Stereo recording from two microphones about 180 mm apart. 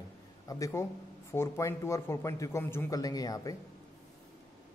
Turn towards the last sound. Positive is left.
turn(degrees=20)  # may be behind; listen again after turning